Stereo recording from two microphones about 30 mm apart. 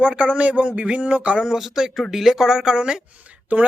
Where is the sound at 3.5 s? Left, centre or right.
Right.